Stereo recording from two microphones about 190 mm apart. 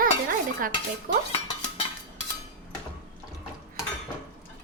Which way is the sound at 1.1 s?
45° right (ahead or behind).